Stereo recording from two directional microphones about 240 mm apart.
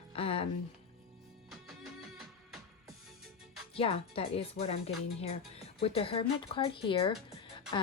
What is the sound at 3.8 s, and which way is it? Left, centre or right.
A woman's voice, left.